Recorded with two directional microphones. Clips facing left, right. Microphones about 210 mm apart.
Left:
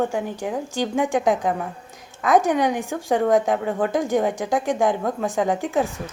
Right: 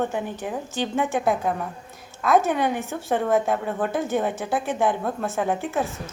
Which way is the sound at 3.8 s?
15° left (ahead or behind).